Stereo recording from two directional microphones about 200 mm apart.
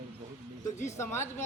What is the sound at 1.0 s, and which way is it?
Speech, 10° left (ahead or behind).